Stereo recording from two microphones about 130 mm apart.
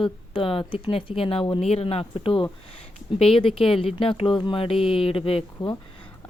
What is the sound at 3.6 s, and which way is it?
Speech, centre (ahead or behind).